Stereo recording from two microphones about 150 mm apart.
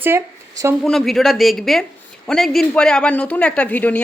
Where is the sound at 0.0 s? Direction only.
20° right (ahead or behind).